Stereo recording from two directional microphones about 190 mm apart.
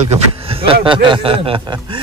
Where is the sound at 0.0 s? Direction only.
30° right (ahead or behind).